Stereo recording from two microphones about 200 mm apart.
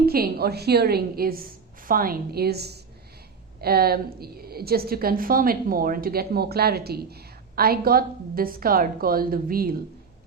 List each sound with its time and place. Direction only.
0.0 s a woman's voice: 50° right (ahead or behind)